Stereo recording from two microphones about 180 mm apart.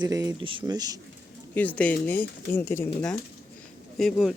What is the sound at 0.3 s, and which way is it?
Speech, 30° right (ahead or behind).